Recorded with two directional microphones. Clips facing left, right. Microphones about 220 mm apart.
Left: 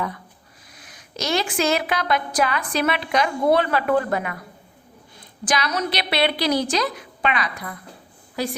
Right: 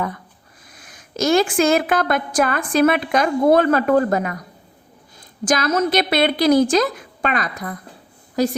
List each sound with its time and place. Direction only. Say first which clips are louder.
0.7 s a woman's voice: right 4 dB; 50° right (ahead or behind)
5.5 s a woman's voice: right 6 dB; 45° right (ahead or behind)